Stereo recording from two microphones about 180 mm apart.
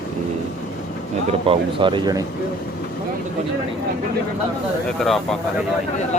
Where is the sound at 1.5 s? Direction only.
25° right (ahead or behind).